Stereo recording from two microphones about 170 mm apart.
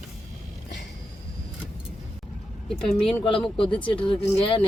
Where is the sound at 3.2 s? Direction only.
30° left (ahead or behind).